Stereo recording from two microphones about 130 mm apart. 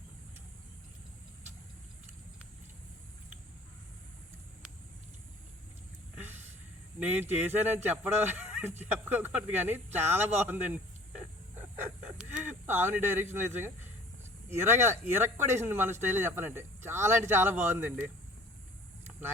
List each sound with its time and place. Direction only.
7.0 s speech: 15° right (ahead or behind)
12.5 s speech: 15° right (ahead or behind)
14.5 s speech: 20° right (ahead or behind)